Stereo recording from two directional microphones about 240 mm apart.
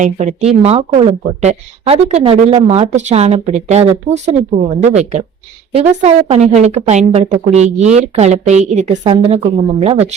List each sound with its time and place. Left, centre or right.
0.0 s speech: right